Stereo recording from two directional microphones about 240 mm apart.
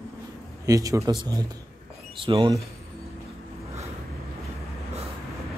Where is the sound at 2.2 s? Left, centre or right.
Right.